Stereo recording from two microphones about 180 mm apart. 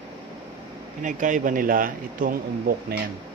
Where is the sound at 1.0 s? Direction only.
45° right (ahead or behind).